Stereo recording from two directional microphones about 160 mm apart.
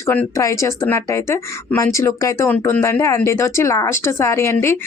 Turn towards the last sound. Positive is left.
turn(degrees=15)  # may be behind; listen again after turning